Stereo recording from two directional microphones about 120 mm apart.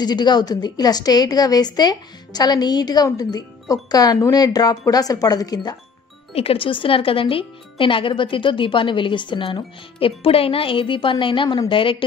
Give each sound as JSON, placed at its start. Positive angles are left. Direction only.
{"t": 0.0, "sound": "a woman's voice", "side_deg": 35}
{"t": 6.3, "sound": "a woman's voice", "side_deg": 55}